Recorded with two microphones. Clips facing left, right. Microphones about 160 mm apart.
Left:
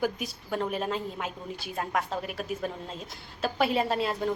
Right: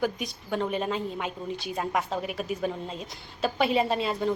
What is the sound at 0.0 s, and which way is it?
A woman's voice, 5° left (ahead or behind).